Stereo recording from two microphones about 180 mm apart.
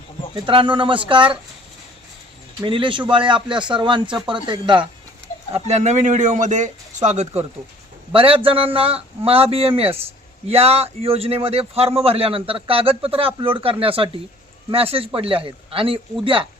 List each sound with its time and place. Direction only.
0.4 s speech: 25° right (ahead or behind)
2.6 s speech: 25° right (ahead or behind)
5.5 s a man's voice: 40° right (ahead or behind)